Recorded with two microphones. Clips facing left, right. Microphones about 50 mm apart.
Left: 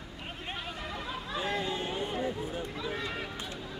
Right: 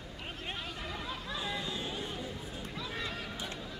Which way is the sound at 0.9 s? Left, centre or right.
Centre.